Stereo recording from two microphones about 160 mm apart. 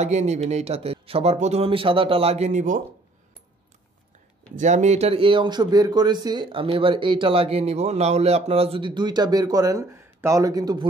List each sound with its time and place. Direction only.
0.0 s speech: 45° right (ahead or behind)
4.6 s speech: 45° right (ahead or behind); by 10.9 s 25° right (ahead or behind)